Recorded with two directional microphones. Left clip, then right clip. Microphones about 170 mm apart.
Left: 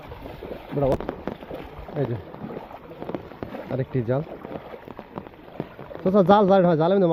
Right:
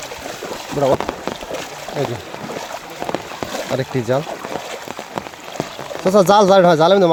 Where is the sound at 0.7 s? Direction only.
40° right (ahead or behind).